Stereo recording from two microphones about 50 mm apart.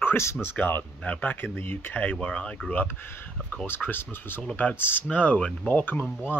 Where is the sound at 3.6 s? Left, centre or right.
Left.